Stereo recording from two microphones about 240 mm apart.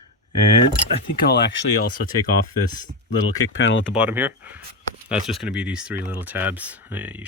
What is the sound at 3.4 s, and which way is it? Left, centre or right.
Speech, left.